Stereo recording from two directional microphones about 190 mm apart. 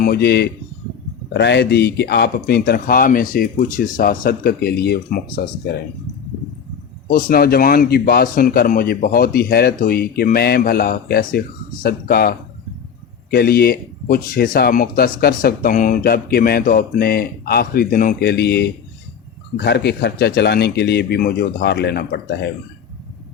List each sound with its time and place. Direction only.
0.0 s a man's voice: 55° left (ahead or behind)
7.1 s a man's voice: 50° left (ahead or behind)